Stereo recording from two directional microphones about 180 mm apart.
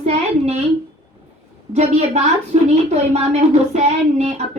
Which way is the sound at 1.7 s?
35° right (ahead or behind).